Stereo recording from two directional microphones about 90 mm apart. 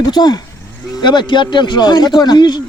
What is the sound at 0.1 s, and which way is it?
Speech, 50° left (ahead or behind).